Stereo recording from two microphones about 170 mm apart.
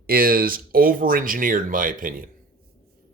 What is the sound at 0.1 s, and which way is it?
Speech, 60° right (ahead or behind).